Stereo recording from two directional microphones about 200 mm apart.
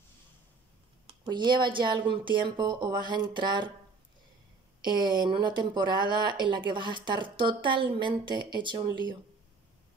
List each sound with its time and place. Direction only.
1.0 s speech: 20° right (ahead or behind)
4.8 s speech: 20° right (ahead or behind)